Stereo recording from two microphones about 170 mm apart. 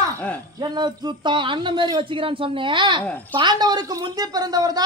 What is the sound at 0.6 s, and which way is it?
A woman's voice, 25° right (ahead or behind).